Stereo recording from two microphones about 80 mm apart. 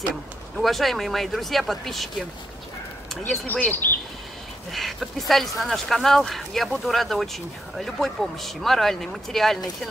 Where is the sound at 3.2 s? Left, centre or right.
Left.